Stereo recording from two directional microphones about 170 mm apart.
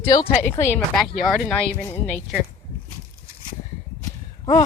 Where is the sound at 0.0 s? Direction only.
20° left (ahead or behind).